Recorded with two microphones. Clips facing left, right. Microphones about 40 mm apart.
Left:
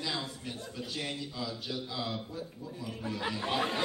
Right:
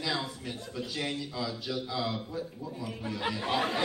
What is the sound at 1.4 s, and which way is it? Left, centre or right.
Speech, right.